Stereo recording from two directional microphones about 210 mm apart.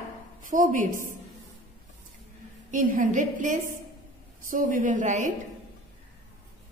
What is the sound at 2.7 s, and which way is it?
A woman's voice, 40° right (ahead or behind).